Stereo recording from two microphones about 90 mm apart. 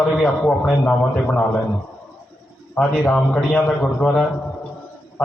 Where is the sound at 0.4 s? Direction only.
Centre (ahead or behind).